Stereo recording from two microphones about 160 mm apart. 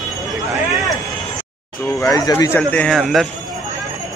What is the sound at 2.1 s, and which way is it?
Speech, 20° left (ahead or behind).